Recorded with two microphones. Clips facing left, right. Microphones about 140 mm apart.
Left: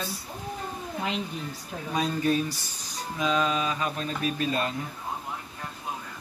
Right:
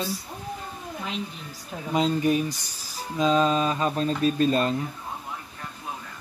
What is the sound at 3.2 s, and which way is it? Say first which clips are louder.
Speech: right 5 dB; 30° right (ahead or behind).